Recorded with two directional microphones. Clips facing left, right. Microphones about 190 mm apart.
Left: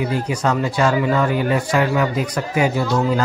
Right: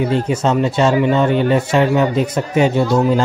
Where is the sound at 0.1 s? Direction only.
25° right (ahead or behind).